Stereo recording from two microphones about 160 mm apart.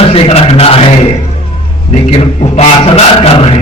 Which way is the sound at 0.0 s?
40° left (ahead or behind).